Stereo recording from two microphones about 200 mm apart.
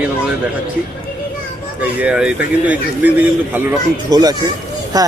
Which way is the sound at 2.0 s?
5° right (ahead or behind).